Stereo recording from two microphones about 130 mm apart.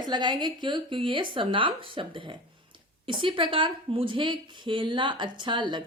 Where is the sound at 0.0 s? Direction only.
35° right (ahead or behind).